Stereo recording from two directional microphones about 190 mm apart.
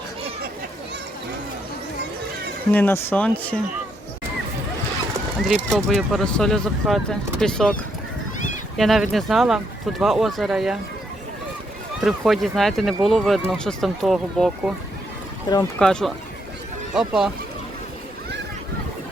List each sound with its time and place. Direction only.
2.7 s speech: 10° left (ahead or behind)
5.5 s speech: centre (ahead or behind)
8.8 s speech: centre (ahead or behind)
11.9 s speech: centre (ahead or behind)
15.5 s speech: 20° left (ahead or behind)
15.8 s speech: 5° left (ahead or behind)